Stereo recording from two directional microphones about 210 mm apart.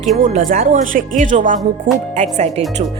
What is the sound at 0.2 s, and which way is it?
A woman's voice, 40° right (ahead or behind).